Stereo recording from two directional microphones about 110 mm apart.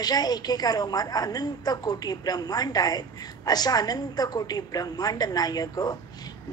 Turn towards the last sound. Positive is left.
turn(degrees=35)  # may be behind; listen again after turning